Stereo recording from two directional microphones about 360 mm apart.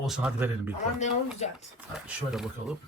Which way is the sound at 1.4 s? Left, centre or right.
Centre.